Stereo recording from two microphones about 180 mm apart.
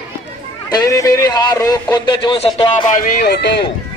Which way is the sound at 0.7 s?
20° left (ahead or behind).